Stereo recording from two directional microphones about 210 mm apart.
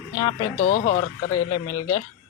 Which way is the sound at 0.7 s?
40° left (ahead or behind).